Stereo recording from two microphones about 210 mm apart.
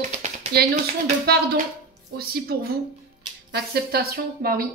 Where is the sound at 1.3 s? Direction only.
45° right (ahead or behind).